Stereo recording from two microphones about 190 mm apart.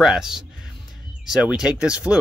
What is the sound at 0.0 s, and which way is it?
Speech, centre (ahead or behind).